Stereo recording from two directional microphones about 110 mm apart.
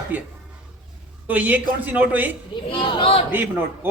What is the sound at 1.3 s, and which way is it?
Speech, 15° right (ahead or behind).